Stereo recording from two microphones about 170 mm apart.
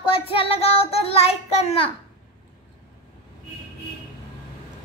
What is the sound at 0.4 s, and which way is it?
Child singing, 35° left (ahead or behind).